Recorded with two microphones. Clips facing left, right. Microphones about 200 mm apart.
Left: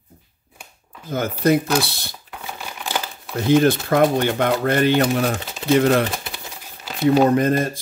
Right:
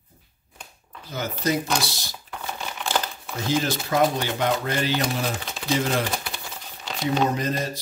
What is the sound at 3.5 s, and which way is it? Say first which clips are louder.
Speech: left 9 dB; 60° left (ahead or behind).